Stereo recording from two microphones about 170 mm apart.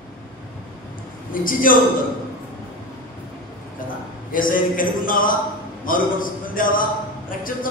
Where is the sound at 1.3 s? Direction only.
55° left (ahead or behind).